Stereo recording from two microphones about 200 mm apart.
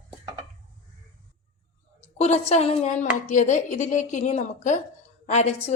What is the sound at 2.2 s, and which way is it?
A woman's voice, 35° left (ahead or behind).